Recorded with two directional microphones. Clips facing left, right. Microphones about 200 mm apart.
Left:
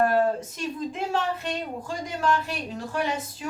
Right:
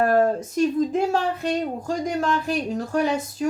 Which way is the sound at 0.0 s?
45° right (ahead or behind).